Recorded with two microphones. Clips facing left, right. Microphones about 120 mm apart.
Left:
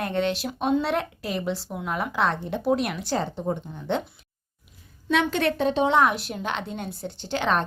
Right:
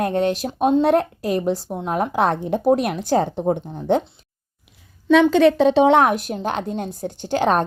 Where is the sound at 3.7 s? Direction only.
40° right (ahead or behind).